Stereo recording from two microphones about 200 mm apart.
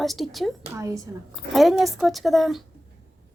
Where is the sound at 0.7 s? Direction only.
15° right (ahead or behind).